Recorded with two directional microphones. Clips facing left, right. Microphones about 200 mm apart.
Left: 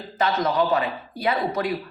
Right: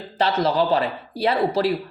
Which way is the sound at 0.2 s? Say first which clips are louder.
Right 2 dB; 30° right (ahead or behind).